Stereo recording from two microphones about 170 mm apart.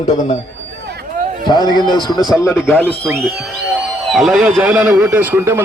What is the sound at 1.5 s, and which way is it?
Speech, 25° left (ahead or behind).